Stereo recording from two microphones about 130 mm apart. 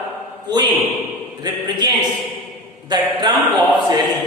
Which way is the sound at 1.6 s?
35° right (ahead or behind).